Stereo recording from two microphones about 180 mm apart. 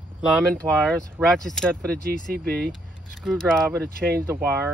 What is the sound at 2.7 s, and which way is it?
Single-lens reflex camera, centre (ahead or behind).